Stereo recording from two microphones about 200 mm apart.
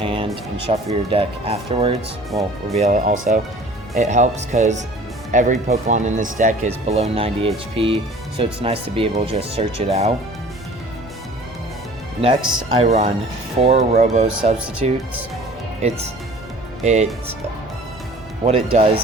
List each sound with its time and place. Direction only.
0.0 s music: 25° right (ahead or behind)
0.7 s speech: 30° right (ahead or behind)
1.9 s speech: 15° right (ahead or behind)
2.8 s speech: 35° right (ahead or behind)
12.2 s speech: 30° right (ahead or behind)
16.8 s speech: 35° right (ahead or behind)
18.4 s speech: 30° right (ahead or behind)